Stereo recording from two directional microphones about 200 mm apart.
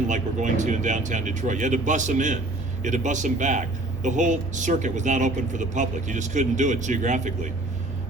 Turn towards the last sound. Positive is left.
turn(degrees=-40)  # may be behind; listen again after turning